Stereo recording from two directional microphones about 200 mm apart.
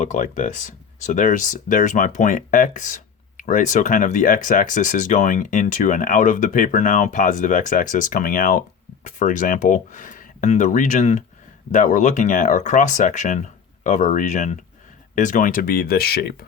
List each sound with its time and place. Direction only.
0.0 s speech: 40° left (ahead or behind)